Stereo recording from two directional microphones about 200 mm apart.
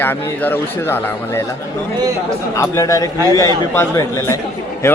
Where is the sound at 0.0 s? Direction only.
10° left (ahead or behind).